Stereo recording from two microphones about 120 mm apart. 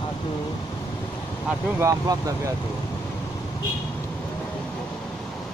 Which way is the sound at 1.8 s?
25° right (ahead or behind).